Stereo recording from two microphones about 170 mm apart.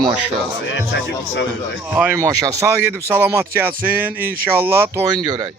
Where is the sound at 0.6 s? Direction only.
90° left.